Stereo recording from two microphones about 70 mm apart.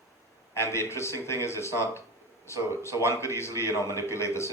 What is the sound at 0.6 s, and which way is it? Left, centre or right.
A man's voice, left.